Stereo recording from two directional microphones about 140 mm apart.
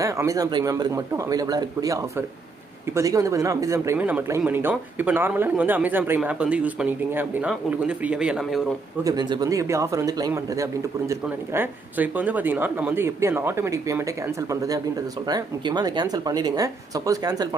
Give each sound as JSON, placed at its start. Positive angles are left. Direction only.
{"t": 0.0, "sound": "speech", "side_deg": -25}
{"t": 9.0, "sound": "speech", "side_deg": -30}
{"t": 11.2, "sound": "speech", "side_deg": -15}